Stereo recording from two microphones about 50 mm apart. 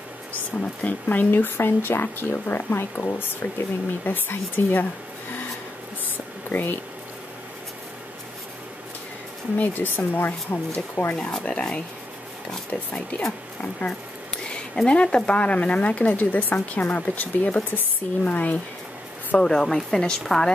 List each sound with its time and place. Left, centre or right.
0.8 s speech: left
6.1 s a sound: left
9.6 s speech: left
11.4 s speech: left
12.4 s a woman's voice: centre
13.6 s speech: left
14.9 s speech: centre
19.3 s a woman's voice: centre